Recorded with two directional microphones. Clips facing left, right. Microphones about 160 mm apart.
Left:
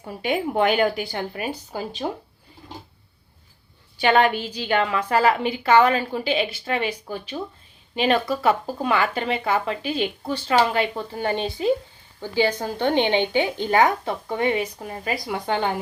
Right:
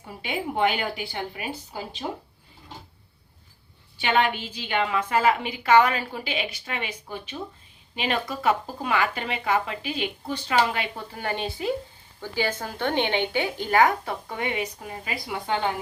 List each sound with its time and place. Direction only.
0.2 s speech: 45° left (ahead or behind)
4.0 s a woman's voice: 40° left (ahead or behind)